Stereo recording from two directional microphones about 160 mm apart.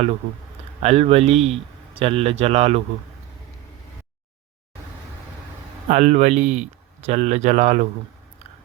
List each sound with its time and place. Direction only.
0.8 s a man's voice: 40° right (ahead or behind)
5.9 s a man's voice: 50° right (ahead or behind)